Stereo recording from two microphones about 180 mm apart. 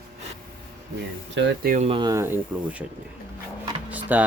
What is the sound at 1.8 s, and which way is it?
Speech, 25° right (ahead or behind).